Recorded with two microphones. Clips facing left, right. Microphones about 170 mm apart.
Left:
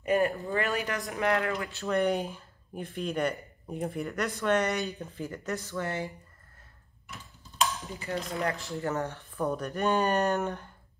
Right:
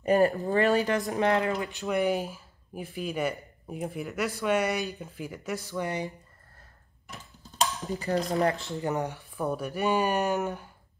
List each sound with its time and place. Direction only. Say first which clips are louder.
0.0 s speech: right 4 dB; 40° right (ahead or behind)
1.2 s speech: even; 20° right (ahead or behind)
8.0 s speech: right 6 dB; 40° right (ahead or behind)
8.7 s speech: right 2 dB; 15° right (ahead or behind)